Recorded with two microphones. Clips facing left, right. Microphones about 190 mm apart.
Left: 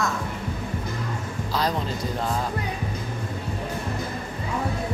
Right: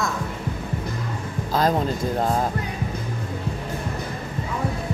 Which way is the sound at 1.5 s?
50° right (ahead or behind).